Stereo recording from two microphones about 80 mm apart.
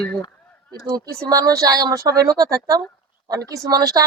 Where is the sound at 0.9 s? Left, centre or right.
Right.